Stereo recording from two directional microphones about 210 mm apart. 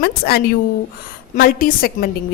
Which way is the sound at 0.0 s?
50° left (ahead or behind).